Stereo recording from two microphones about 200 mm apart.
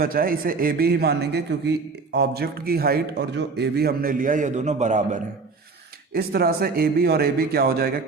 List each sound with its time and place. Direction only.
0.0 s a man's voice: 45° right (ahead or behind)
6.1 s a man's voice: 50° right (ahead or behind)